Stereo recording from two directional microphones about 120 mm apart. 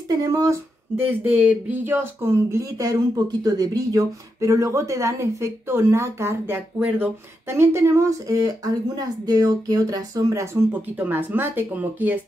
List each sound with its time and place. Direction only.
0.3 s speech: 25° right (ahead or behind)